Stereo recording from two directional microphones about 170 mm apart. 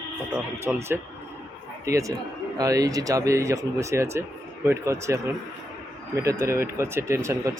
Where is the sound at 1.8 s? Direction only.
20° right (ahead or behind).